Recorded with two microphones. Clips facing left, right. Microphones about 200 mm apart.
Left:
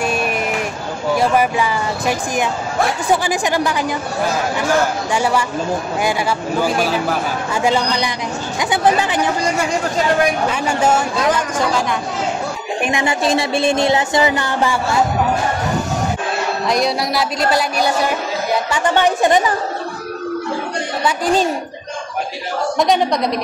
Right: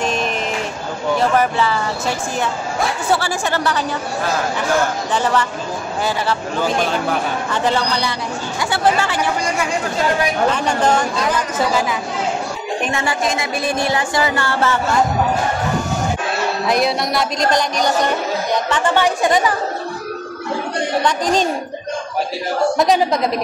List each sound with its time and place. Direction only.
0.0 s a sound: 10° left (ahead or behind)
1.1 s speech: 10° left (ahead or behind)
5.1 s speech: 10° left (ahead or behind)
8.5 s music: 20° left (ahead or behind)
10.5 s speech: 10° left (ahead or behind)
11.5 s speech: 5° right (ahead or behind)
12.8 s a woman's voice: 15° left (ahead or behind)
13.2 s music: 30° left (ahead or behind); by 15.0 s 10° left (ahead or behind)
16.6 s speech: 5° right (ahead or behind)
21.0 s speech: 5° left (ahead or behind)
22.8 s speech: centre (ahead or behind)